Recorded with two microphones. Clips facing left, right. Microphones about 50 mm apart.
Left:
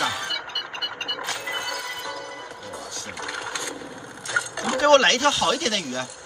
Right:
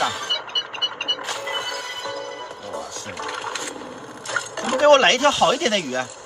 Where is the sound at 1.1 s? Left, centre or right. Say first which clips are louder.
Right 3 dB; centre.